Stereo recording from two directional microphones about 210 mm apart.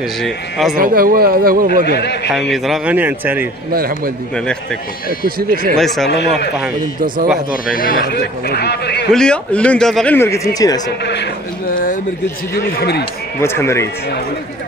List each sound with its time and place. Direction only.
0.2 s speech: centre (ahead or behind)
0.7 s speech: 45° right (ahead or behind)
1.9 s a man's voice: 50° left (ahead or behind)
2.5 s speech: centre (ahead or behind)
3.7 s speech: 45° right (ahead or behind)
5.4 s speech: 45° right (ahead or behind)
5.8 s speech: centre (ahead or behind)
7.6 s a man's voice: 45° left (ahead or behind)
9.1 s speech: 5° left (ahead or behind)
11.7 s a sound: 40° left (ahead or behind)
12.5 s a man's voice: 50° left (ahead or behind)
13.4 s speech: 10° left (ahead or behind)